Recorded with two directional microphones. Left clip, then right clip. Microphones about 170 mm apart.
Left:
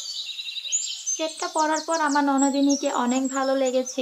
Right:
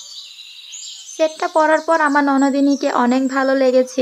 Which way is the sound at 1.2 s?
35° right (ahead or behind).